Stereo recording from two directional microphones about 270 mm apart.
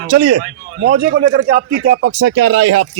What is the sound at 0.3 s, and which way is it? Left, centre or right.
Speech, right.